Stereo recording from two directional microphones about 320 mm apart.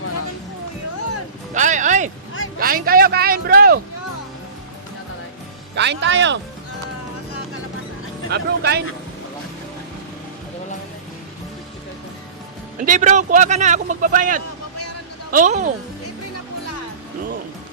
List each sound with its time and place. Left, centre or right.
1.5 s a sound: right
2.6 s a man's voice: right
5.7 s speech: right
8.3 s speech: right
12.8 s a man's voice: right